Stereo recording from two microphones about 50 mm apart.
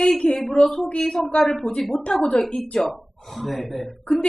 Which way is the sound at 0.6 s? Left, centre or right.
Centre.